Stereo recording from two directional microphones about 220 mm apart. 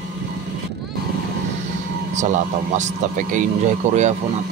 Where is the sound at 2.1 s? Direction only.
35° right (ahead or behind).